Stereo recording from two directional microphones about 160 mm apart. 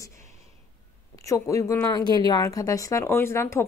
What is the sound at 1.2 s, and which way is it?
A woman's voice, 20° left (ahead or behind).